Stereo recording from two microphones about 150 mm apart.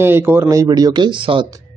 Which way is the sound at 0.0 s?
15° right (ahead or behind).